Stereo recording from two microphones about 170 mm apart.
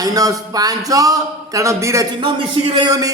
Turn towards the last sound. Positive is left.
turn(degrees=-20)  # may be behind; listen again after turning